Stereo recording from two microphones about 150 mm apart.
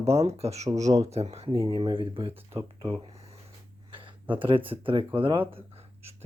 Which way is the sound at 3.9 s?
35° right (ahead or behind).